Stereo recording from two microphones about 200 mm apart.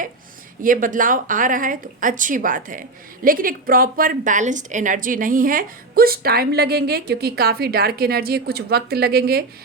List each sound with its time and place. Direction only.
0.6 s a woman's voice: 40° right (ahead or behind)